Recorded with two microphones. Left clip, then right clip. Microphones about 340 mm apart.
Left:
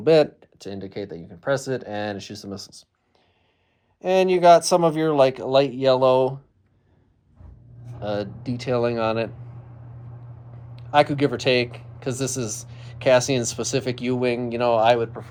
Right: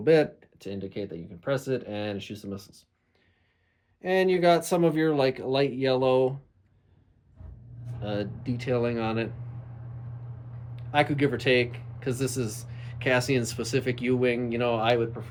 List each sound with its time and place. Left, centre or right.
0.0 s speech: centre
4.0 s speech: centre
8.0 s speech: centre
10.8 s speech: centre